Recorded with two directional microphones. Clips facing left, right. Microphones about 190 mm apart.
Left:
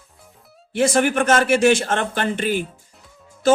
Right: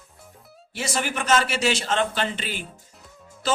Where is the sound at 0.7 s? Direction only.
55° left (ahead or behind).